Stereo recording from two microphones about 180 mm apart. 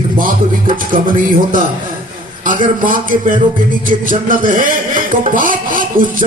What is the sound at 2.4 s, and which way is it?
A man's voice, 50° right (ahead or behind).